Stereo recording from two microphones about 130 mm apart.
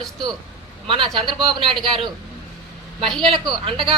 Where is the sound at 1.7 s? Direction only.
Centre (ahead or behind).